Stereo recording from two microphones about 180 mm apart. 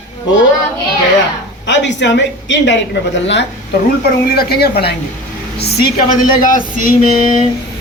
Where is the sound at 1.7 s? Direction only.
80° left.